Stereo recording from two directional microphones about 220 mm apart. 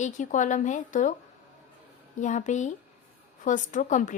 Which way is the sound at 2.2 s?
35° left (ahead or behind).